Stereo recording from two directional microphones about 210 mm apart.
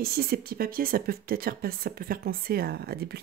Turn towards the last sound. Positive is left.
turn(degrees=-50)  # may be behind; listen again after turning